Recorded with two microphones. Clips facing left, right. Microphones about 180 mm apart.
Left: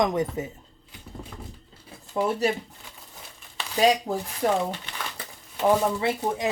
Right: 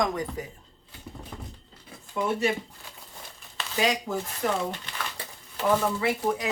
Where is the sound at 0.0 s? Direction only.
20° left (ahead or behind).